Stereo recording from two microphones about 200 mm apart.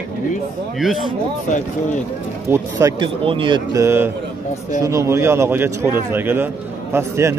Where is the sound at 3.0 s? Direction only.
25° right (ahead or behind).